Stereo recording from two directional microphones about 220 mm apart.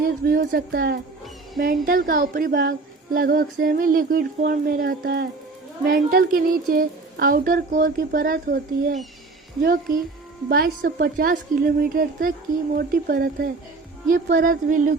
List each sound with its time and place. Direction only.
0.0 s speech: 45° right (ahead or behind)
1.5 s female singing: 40° right (ahead or behind)
9.6 s speech: 40° right (ahead or behind)
10.5 s female singing: 40° right (ahead or behind)